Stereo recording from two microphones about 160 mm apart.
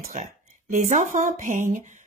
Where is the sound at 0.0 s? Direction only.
55° right (ahead or behind).